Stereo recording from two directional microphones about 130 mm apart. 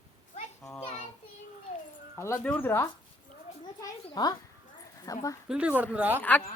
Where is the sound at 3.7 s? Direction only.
30° left (ahead or behind).